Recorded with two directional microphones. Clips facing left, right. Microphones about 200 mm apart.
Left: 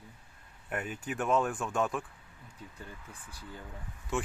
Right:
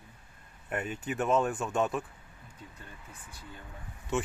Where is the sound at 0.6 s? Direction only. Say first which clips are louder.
Right 2 dB; centre (ahead or behind).